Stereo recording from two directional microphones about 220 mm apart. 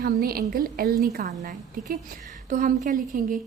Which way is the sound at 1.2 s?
30° right (ahead or behind).